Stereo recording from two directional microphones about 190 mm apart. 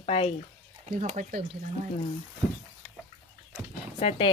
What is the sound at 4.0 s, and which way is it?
Speech, 30° left (ahead or behind).